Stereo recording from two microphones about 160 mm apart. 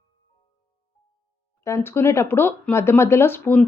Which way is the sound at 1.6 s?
15° left (ahead or behind).